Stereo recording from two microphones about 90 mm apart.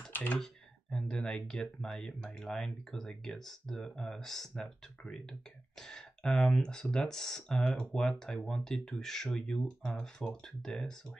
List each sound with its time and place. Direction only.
0.1 s computer keyboard: 20° left (ahead or behind)
0.8 s speech: 10° left (ahead or behind)